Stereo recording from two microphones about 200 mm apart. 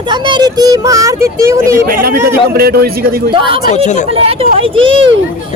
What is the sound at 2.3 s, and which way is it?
Speech, 50° right (ahead or behind).